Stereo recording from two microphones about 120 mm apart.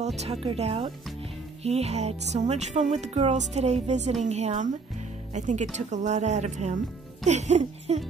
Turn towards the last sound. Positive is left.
turn(degrees=-75)  # may be behind; listen again after turning